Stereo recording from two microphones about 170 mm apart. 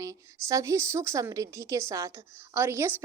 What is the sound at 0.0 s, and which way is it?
A woman's voice, 20° right (ahead or behind).